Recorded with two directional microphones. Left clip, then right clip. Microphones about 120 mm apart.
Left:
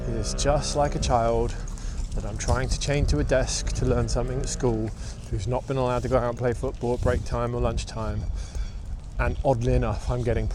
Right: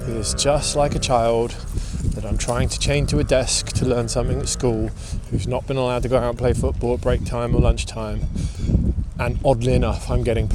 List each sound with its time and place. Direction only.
0.2 s speech: 40° right (ahead or behind)
9.1 s speech: 40° right (ahead or behind)